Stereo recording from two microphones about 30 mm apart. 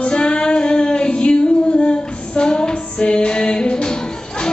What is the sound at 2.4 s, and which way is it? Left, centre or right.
Music, left.